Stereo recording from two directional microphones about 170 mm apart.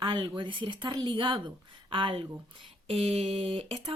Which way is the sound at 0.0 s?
30° right (ahead or behind).